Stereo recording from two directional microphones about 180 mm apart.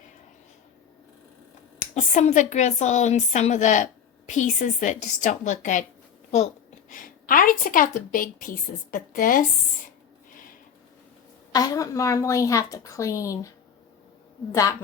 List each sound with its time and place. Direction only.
1.8 s a woman's voice: 40° left (ahead or behind)
6.9 s a woman's voice: 50° left (ahead or behind)
10.3 s a sound: 50° left (ahead or behind)
11.5 s a woman's voice: 20° left (ahead or behind)
14.5 s a woman's voice: 20° left (ahead or behind)